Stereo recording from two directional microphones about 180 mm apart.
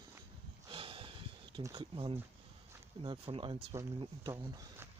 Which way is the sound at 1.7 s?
30° right (ahead or behind).